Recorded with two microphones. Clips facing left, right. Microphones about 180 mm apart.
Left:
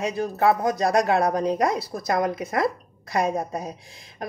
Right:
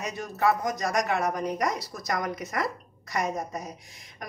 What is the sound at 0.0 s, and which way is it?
Speech, 30° left (ahead or behind).